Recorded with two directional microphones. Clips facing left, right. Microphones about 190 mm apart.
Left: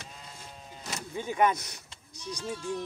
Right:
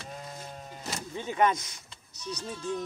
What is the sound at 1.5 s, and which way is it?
Speech, 65° left (ahead or behind).